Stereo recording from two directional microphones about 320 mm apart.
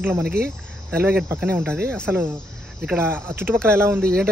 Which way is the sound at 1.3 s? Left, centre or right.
Centre.